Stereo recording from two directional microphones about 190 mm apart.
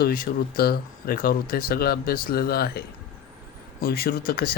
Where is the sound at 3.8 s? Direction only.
55° left (ahead or behind).